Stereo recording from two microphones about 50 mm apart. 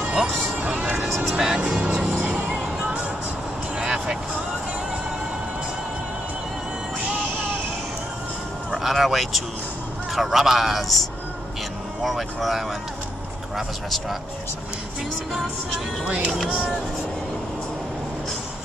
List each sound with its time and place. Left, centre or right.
0.0 s music: right
0.6 s music: right
1.0 s music: centre
1.4 s music: centre
3.8 s vehicle: centre
8.7 s a man's voice: centre
16.4 s speech: right